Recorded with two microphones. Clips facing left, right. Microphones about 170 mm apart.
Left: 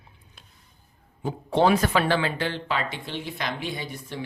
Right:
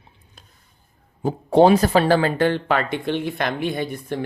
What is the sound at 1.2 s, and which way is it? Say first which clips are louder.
Speech: right 7 dB; 40° right (ahead or behind).